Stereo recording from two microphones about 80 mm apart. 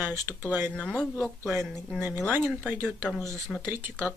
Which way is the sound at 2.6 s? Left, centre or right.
Right.